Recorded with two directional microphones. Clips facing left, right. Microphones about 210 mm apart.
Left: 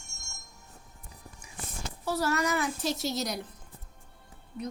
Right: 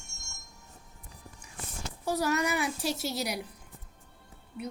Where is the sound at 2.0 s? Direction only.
15° right (ahead or behind).